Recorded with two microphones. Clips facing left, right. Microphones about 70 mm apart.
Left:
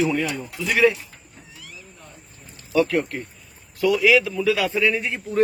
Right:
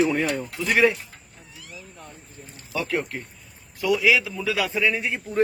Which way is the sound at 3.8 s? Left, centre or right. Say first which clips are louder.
Left 3 dB; centre.